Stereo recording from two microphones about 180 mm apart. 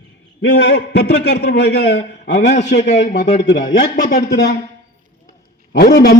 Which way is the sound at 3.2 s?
40° left (ahead or behind).